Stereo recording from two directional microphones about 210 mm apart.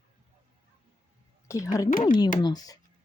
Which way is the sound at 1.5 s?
15° left (ahead or behind).